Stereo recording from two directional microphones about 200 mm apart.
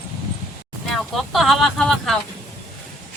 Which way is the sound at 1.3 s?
Centre (ahead or behind).